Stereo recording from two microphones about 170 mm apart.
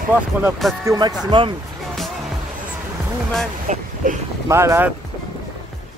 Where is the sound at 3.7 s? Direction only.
45° right (ahead or behind).